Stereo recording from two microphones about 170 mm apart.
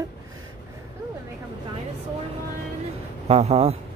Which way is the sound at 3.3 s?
35° right (ahead or behind).